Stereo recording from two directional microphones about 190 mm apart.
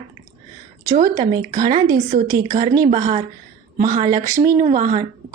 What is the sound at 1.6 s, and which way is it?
Speech, 20° right (ahead or behind).